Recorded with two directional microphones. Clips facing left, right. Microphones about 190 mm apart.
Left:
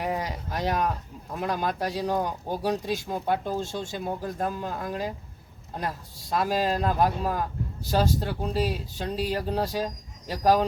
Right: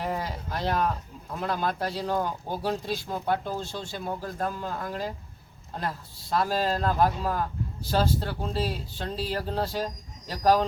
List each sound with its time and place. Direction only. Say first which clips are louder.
0.2 s speech: left 1 dB; 15° left (ahead or behind)